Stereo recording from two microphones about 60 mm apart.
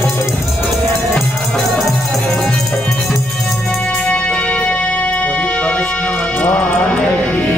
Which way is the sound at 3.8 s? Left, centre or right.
Centre.